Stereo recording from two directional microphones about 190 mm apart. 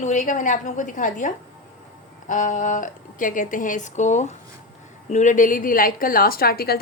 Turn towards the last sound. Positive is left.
turn(degrees=55)  # may be behind; listen again after turning